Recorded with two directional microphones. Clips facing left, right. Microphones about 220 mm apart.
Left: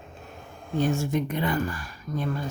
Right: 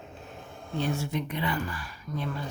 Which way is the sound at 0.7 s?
45° left (ahead or behind).